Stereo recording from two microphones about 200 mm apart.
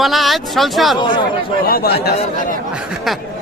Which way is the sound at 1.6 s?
50° left (ahead or behind).